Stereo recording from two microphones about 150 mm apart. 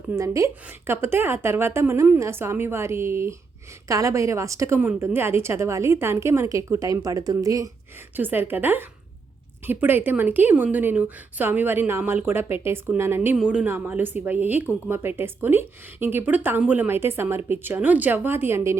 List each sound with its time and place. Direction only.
0.1 s a woman's voice: 20° right (ahead or behind)
8.1 s a woman's voice: 15° right (ahead or behind)